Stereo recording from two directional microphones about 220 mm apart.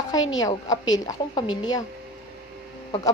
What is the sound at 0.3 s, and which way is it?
A woman's voice, 15° left (ahead or behind).